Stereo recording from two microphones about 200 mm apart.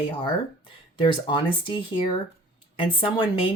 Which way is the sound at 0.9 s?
25° left (ahead or behind).